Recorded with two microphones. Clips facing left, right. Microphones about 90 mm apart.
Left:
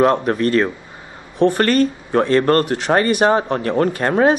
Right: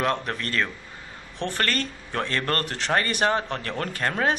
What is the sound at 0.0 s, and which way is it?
Speech, 25° left (ahead or behind).